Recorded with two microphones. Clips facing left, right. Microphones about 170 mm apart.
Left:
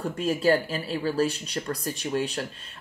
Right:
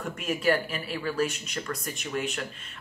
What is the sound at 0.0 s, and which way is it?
Speech, 30° left (ahead or behind).